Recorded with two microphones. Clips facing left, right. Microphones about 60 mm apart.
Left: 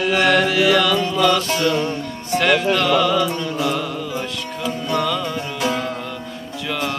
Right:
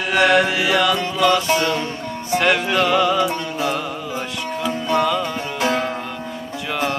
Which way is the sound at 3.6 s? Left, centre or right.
Centre.